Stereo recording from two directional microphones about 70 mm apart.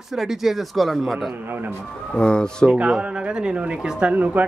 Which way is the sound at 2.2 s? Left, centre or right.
Centre.